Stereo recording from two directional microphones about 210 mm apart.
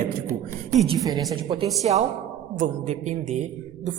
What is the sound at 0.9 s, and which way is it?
A woman's voice, 15° right (ahead or behind).